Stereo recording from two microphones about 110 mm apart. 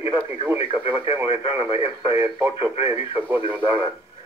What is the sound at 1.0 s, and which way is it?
Speech, 60° left (ahead or behind).